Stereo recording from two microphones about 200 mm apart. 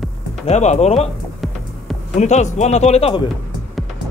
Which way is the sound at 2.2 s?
35° left (ahead or behind).